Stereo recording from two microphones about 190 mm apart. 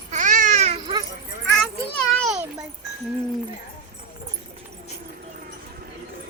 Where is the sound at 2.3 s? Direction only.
15° right (ahead or behind).